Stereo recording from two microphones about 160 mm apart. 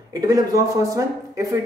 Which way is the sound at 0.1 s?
20° right (ahead or behind).